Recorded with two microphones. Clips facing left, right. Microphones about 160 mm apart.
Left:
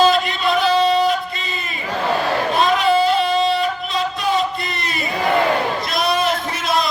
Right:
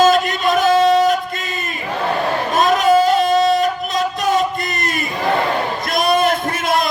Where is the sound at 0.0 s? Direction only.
45° right (ahead or behind).